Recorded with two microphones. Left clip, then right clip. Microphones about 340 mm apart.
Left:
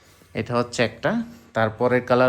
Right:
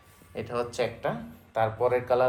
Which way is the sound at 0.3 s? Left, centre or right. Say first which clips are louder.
Left 7 dB; centre.